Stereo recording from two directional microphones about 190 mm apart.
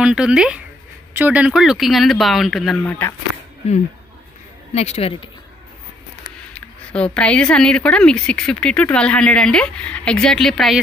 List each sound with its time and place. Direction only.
0.0 s speech: 5° right (ahead or behind)
2.8 s speech: 15° left (ahead or behind)
4.7 s speech: 35° left (ahead or behind)
6.5 s speech: 5° left (ahead or behind)